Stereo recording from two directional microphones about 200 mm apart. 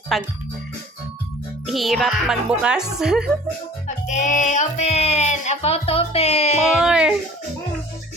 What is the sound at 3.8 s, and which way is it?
Speech, 40° left (ahead or behind).